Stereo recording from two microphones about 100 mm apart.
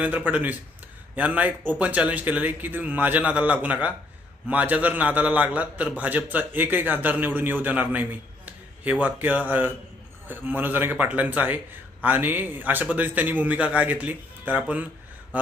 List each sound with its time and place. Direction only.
0.3 s a man's voice: 15° right (ahead or behind)